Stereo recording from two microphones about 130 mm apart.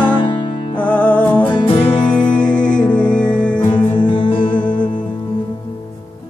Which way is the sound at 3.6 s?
35° left (ahead or behind).